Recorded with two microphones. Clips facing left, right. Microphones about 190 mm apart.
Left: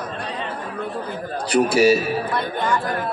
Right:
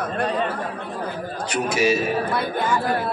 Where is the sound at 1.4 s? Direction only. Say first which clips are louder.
Left 6 dB; 35° left (ahead or behind).